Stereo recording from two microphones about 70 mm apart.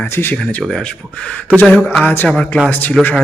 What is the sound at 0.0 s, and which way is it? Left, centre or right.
Speech, left.